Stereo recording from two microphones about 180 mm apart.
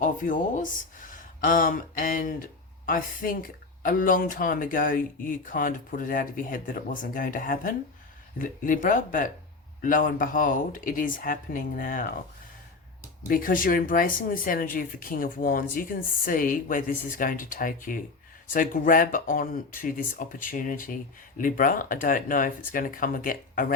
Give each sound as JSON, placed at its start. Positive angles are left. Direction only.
{"t": 0.0, "sound": "speech", "side_deg": 45}
{"t": 13.2, "sound": "speech", "side_deg": 50}